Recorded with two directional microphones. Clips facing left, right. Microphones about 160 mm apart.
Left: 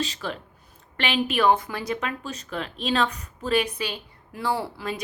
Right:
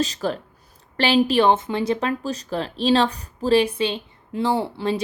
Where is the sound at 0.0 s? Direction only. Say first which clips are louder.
Right 6 dB; 40° right (ahead or behind).